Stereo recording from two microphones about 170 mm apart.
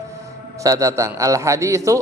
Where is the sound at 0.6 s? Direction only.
20° right (ahead or behind).